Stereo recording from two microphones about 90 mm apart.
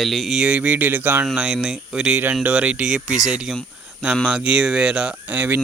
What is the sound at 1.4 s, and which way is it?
Speech, 10° right (ahead or behind).